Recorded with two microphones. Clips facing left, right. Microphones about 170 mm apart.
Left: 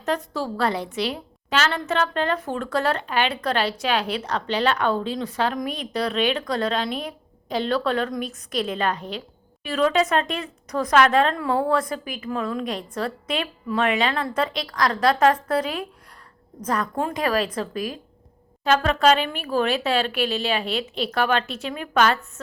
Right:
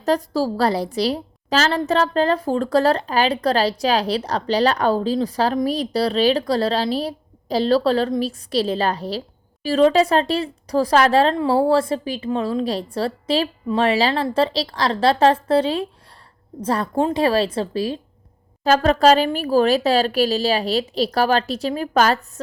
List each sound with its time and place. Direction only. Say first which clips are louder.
0.0 s a woman's voice: right 6 dB; 35° right (ahead or behind)